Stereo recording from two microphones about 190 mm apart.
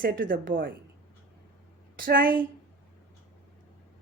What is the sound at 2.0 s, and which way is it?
Speech, 50° right (ahead or behind).